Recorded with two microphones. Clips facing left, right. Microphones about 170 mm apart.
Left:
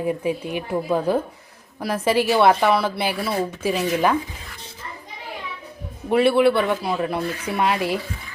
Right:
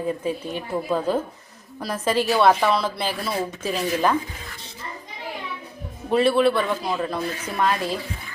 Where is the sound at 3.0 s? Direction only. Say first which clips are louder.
Left 3 dB; 5° left (ahead or behind).